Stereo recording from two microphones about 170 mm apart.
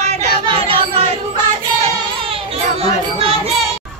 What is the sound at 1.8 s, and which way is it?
Children playing, 35° right (ahead or behind).